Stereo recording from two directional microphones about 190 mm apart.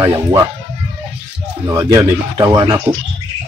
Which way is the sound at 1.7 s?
15° right (ahead or behind).